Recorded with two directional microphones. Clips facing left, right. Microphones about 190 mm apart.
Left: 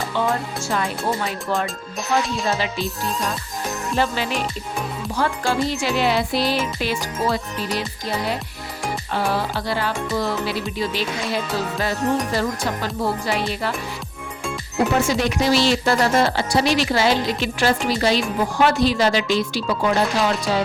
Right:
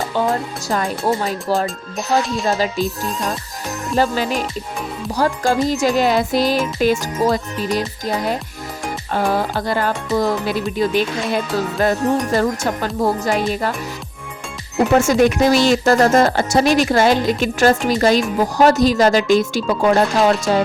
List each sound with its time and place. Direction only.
0.3 s speech: 40° right (ahead or behind)
2.2 s music: centre (ahead or behind)
2.5 s speech: 40° right (ahead or behind)
3.9 s speech: 40° right (ahead or behind)
14.9 s speech: 50° right (ahead or behind)